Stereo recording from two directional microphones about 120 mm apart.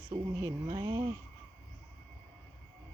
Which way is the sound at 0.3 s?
35° right (ahead or behind).